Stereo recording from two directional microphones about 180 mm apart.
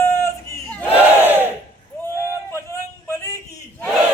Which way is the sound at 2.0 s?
15° left (ahead or behind).